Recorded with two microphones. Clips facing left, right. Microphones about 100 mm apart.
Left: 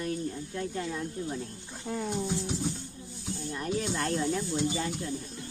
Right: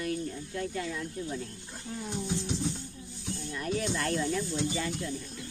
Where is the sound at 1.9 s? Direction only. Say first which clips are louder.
Left 6 dB; 60° left (ahead or behind).